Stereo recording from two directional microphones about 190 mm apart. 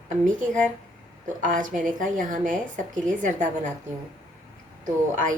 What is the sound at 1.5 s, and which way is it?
A woman's voice, 45° right (ahead or behind).